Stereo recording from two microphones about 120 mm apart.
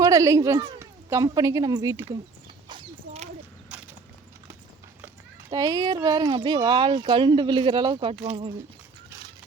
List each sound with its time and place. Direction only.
0.0 s a woman's voice: 30° right (ahead or behind)
2.6 s a sound: 45° right (ahead or behind)
3.7 s clip-clop: 10° right (ahead or behind)
5.5 s speech: 30° right (ahead or behind); by 8.5 s 50° right (ahead or behind)